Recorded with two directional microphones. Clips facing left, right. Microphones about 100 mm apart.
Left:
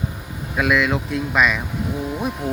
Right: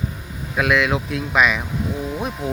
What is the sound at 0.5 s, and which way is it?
Speech, centre (ahead or behind).